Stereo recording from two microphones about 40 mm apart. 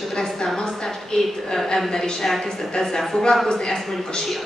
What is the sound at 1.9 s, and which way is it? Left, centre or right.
A woman's voice, centre.